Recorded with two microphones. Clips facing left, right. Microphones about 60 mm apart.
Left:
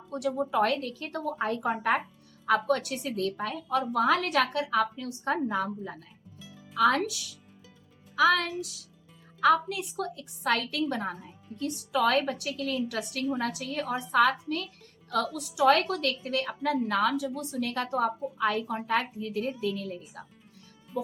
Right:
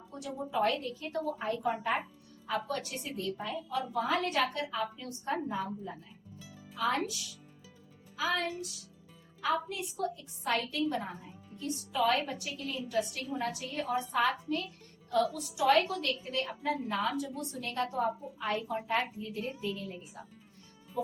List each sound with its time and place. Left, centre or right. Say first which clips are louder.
0.1 s a woman's voice: left 8 dB; left
8.1 s speech: left 9 dB; left
9.4 s a woman's voice: left 8 dB; left